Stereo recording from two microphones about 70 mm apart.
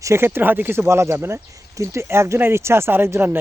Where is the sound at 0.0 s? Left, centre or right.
Right.